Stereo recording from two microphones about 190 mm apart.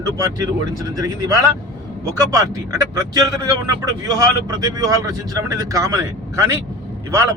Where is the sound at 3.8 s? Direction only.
20° right (ahead or behind).